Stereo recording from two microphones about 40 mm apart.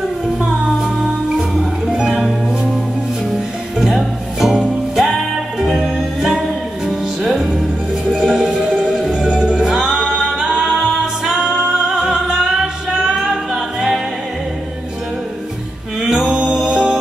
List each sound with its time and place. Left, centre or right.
0.4 s music: centre
8.3 s music: centre
9.6 s singing: centre
13.5 s music: centre
16.0 s music: centre